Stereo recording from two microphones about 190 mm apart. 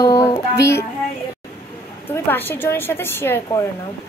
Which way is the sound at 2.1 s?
10° left (ahead or behind).